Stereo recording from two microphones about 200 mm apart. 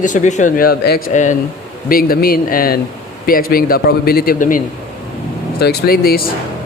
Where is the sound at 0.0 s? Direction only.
40° left (ahead or behind).